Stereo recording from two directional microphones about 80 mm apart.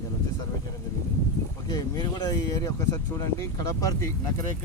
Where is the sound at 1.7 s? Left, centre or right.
Left.